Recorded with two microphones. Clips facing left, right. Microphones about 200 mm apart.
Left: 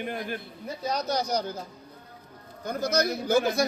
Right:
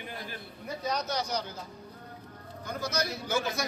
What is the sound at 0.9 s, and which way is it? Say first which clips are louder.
Speech: left 4 dB; 35° left (ahead or behind).